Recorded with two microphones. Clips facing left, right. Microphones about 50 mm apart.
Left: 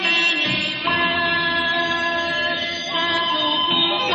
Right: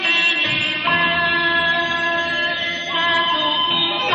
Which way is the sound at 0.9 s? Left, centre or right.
Centre.